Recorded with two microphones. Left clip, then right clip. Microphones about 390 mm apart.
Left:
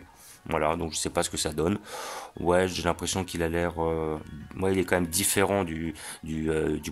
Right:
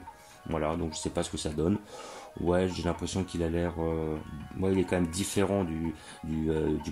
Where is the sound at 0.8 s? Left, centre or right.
Left.